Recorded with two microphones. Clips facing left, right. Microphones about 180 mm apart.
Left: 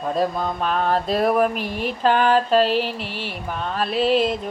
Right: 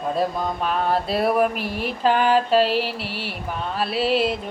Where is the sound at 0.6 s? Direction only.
10° right (ahead or behind).